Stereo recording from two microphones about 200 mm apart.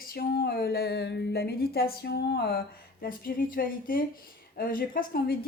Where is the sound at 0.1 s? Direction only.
50° left (ahead or behind).